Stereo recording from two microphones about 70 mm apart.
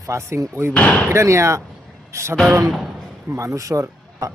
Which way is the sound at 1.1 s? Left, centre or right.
Right.